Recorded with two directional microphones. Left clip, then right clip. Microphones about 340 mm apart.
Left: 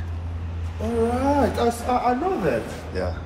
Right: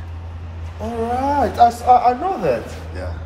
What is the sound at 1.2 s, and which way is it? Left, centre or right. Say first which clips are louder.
Speech: right 11 dB; centre.